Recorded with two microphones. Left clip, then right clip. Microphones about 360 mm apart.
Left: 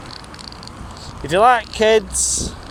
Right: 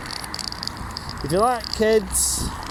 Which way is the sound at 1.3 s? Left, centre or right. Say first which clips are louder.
Left 7 dB; left.